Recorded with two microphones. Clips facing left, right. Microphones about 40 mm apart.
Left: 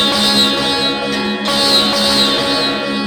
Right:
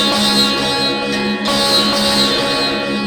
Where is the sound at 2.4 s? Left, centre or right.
Centre.